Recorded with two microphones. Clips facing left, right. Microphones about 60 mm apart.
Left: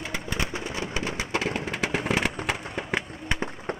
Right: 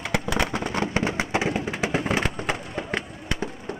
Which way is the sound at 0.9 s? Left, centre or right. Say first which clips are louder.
Right 5 dB; right.